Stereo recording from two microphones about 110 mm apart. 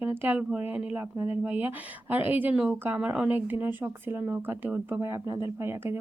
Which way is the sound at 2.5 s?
5° right (ahead or behind).